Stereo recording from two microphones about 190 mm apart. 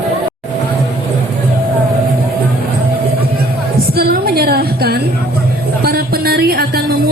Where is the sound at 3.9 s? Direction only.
55° right (ahead or behind).